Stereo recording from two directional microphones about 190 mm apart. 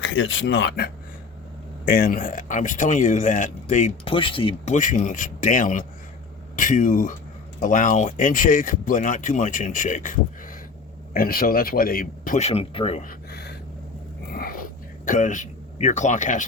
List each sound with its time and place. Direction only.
0.0 s speech: 80° left; by 3.9 s 40° left (ahead or behind)
4.0 s speech: 30° left (ahead or behind)
13.1 s a sound: 60° left (ahead or behind)
15.0 s speech: 40° left (ahead or behind)